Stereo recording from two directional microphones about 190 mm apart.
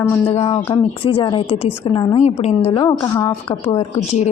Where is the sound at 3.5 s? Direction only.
30° left (ahead or behind).